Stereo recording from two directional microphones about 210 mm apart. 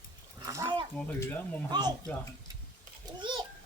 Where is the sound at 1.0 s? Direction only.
10° left (ahead or behind).